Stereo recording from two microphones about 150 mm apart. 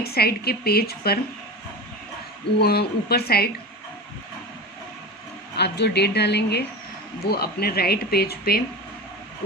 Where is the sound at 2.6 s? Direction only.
90° left.